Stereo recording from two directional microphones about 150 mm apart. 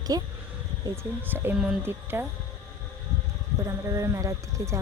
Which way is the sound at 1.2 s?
15° right (ahead or behind).